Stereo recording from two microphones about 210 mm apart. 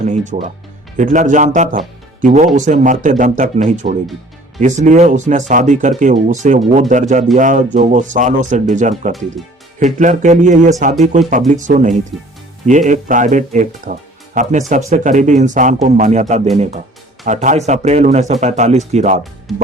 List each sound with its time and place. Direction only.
0.0 s music: 35° right (ahead or behind)
0.9 s speech: 35° right (ahead or behind)
17.2 s speech: 35° right (ahead or behind)
19.5 s music: centre (ahead or behind)